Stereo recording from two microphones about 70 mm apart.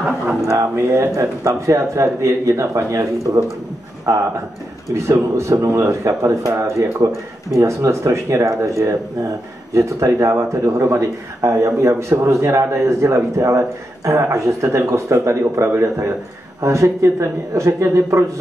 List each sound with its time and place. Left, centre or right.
0.5 s speech: right
4.1 s speech: right